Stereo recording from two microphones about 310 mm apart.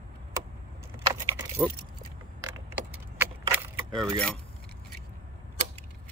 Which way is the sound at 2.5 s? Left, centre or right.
Centre.